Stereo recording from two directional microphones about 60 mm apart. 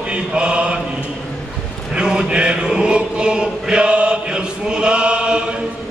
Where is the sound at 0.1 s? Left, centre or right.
Centre.